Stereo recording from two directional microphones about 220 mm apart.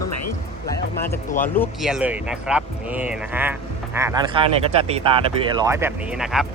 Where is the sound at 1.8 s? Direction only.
5° right (ahead or behind).